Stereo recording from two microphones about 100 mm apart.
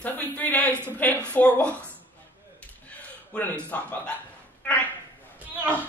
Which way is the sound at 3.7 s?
15° left (ahead or behind).